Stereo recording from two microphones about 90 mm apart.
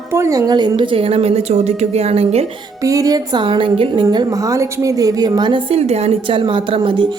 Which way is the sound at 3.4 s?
70° right (ahead or behind).